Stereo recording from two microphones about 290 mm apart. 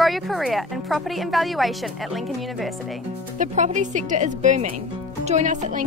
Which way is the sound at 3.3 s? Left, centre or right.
Right.